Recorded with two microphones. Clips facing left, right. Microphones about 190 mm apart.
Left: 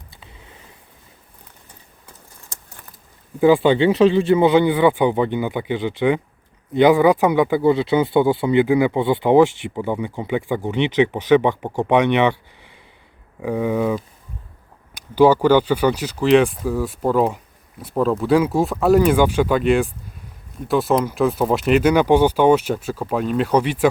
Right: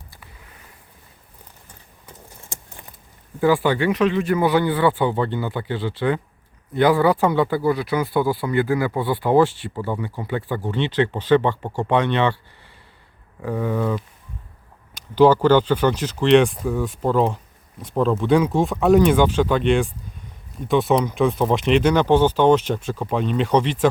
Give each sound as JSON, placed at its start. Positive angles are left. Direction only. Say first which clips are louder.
{"t": 0.2, "sound": "a sound", "louder": "left 2 dB", "side_deg": 25}
{"t": 3.4, "sound": "speech", "louder": "left 4 dB", "side_deg": 20}
{"t": 15.1, "sound": "speech", "louder": "left 1 dB", "side_deg": 10}